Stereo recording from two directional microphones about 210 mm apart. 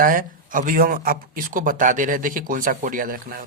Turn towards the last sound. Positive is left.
turn(degrees=-40)  # may be behind; listen again after turning